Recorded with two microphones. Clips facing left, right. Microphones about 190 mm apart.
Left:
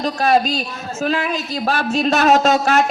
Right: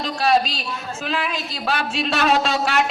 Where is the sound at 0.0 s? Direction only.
45° left (ahead or behind).